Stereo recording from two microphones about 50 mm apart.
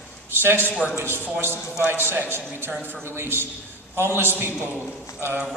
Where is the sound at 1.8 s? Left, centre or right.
Right.